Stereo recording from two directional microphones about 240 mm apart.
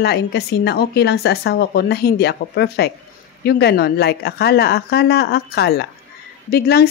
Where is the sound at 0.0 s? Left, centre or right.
Left.